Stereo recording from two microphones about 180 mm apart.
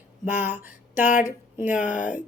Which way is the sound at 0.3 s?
10° right (ahead or behind).